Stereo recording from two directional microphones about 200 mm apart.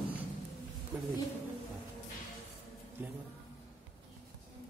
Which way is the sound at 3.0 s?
10° right (ahead or behind).